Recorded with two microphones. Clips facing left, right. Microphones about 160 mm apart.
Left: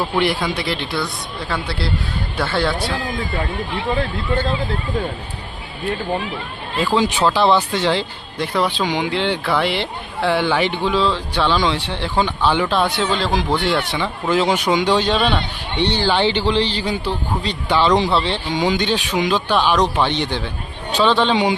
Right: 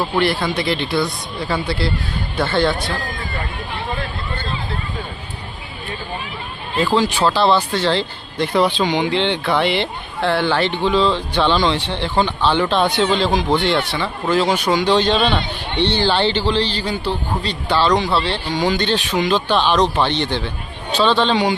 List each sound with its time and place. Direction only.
0.2 s speech: 15° left (ahead or behind)
7.3 s speech: 15° left (ahead or behind)
8.5 s speech: centre (ahead or behind)